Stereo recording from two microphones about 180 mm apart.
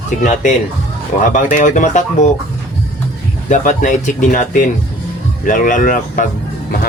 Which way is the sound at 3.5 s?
45° left (ahead or behind).